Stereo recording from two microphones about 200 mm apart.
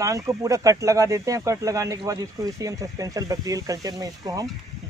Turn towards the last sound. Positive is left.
turn(degrees=-15)  # may be behind; listen again after turning